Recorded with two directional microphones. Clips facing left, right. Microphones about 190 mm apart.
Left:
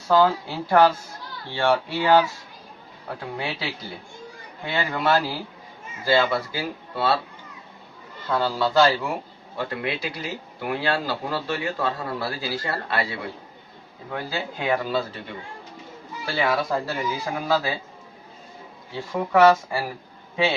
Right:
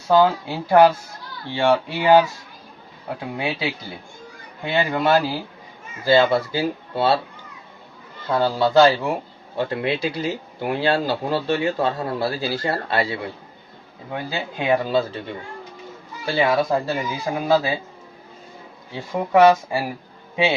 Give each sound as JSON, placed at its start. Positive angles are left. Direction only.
{"t": 0.1, "sound": "speech", "side_deg": -20}
{"t": 8.3, "sound": "speech", "side_deg": -20}
{"t": 16.2, "sound": "speech", "side_deg": -20}
{"t": 19.1, "sound": "speech", "side_deg": -20}